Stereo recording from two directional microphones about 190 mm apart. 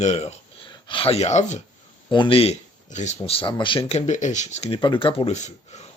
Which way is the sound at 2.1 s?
25° left (ahead or behind).